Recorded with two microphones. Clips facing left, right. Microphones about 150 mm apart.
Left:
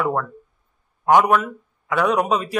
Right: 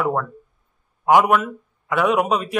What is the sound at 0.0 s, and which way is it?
A man's voice, centre (ahead or behind).